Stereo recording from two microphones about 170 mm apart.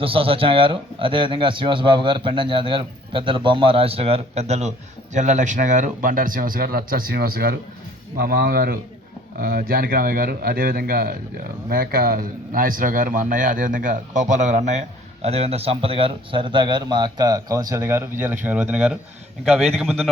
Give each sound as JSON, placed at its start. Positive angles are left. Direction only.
{"t": 0.0, "sound": "a man's voice", "side_deg": -35}